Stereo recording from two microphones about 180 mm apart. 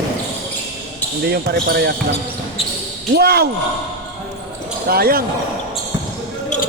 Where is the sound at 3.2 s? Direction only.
60° right (ahead or behind).